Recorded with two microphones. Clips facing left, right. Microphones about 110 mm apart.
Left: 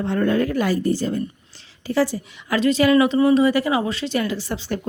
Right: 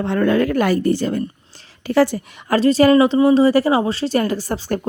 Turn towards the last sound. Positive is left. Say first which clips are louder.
# right 4 dB
turn(degrees=-45)  # may be behind; listen again after turning